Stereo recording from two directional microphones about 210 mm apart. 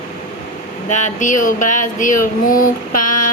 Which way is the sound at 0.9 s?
35° left (ahead or behind).